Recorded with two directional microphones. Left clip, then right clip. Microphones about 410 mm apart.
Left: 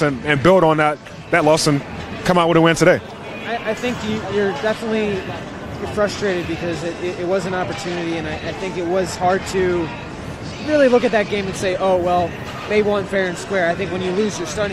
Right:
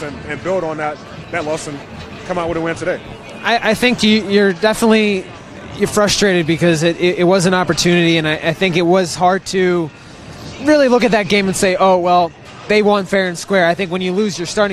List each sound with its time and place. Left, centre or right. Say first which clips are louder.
0.0 s a man's voice: left 8 dB; left
3.4 s speech: right 9 dB; right
10.8 s speech: left 2 dB; right
14.6 s speech: right 8 dB; right